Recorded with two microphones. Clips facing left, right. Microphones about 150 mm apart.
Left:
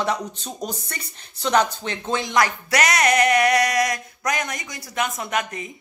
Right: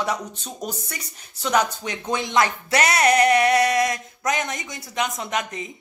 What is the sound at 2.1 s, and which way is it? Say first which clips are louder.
Music: even; 20° right (ahead or behind).